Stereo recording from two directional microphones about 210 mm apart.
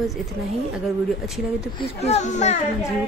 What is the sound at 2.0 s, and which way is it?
Speech, 30° left (ahead or behind).